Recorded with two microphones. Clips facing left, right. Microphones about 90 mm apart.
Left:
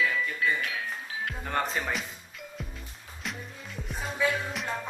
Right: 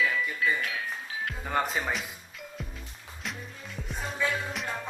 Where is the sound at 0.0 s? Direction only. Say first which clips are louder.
Even; centre (ahead or behind).